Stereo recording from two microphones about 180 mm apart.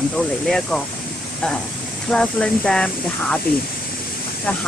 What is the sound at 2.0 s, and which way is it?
Speech, 5° left (ahead or behind).